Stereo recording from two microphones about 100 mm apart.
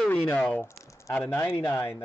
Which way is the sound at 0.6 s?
30° left (ahead or behind).